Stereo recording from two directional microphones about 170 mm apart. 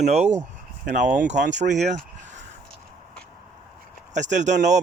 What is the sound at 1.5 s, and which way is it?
Speech, 45° right (ahead or behind).